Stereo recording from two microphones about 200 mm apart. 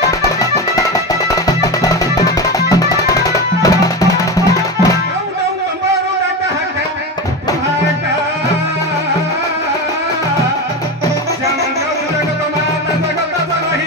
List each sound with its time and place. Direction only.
1.3 s music: 15° left (ahead or behind)